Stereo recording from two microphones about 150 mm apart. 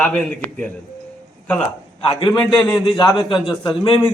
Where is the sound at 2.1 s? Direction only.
35° left (ahead or behind).